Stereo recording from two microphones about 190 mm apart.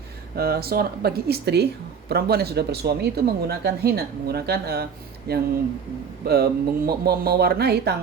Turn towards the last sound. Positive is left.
turn(degrees=-55)  # may be behind; listen again after turning